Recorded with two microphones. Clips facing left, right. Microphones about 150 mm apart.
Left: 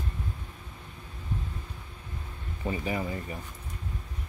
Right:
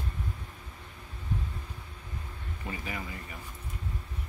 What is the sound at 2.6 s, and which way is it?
Speech, 30° left (ahead or behind).